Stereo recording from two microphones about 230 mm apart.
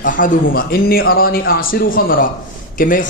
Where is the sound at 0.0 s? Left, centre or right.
Left.